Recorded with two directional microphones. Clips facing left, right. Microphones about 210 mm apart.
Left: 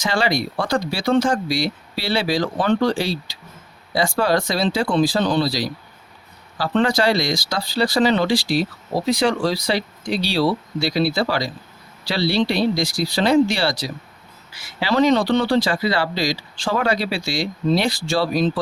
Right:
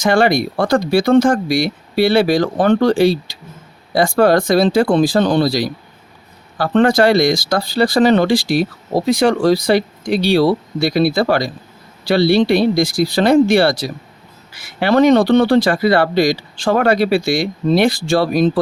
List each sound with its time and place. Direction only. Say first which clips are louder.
0.0 s speech: right 7 dB; 50° right (ahead or behind)